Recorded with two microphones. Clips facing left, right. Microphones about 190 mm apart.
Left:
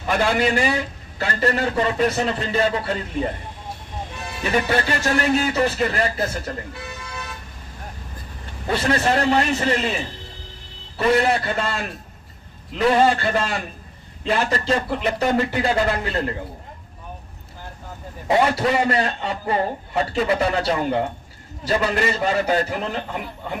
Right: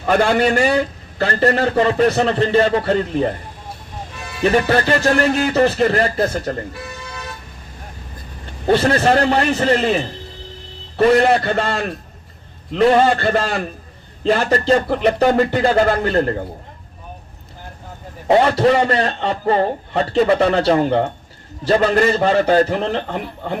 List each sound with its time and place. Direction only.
0.1 s a man's voice: 50° right (ahead or behind)
4.4 s a man's voice: 50° right (ahead or behind)
8.6 s speech: 35° right (ahead or behind)
9.6 s a man's voice: 50° right (ahead or behind)
11.6 s speech: 40° right (ahead or behind)
18.3 s a man's voice: 35° right (ahead or behind)